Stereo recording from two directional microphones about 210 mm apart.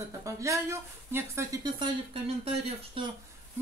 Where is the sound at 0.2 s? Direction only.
15° right (ahead or behind).